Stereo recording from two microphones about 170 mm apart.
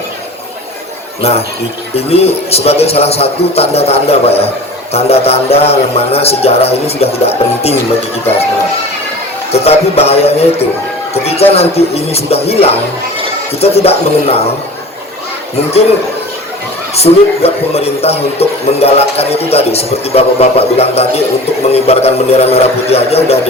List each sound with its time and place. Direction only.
1.2 s speech: 35° left (ahead or behind)
9.5 s speech: 35° left (ahead or behind)
11.1 s a sound: 35° left (ahead or behind)
11.5 s speech: 35° left (ahead or behind)
16.9 s speech: 35° left (ahead or behind)